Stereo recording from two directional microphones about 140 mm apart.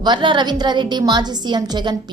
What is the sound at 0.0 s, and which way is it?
A woman's voice, 35° right (ahead or behind).